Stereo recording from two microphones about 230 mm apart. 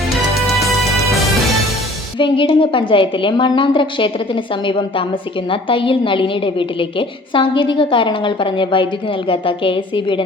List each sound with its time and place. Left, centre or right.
0.3 s music: centre
2.1 s a woman's voice: left